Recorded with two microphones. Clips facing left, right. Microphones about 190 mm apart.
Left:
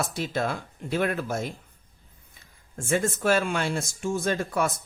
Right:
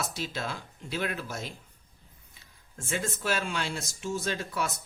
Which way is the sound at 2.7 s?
50° left (ahead or behind).